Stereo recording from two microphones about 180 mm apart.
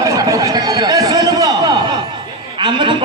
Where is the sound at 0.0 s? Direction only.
20° right (ahead or behind).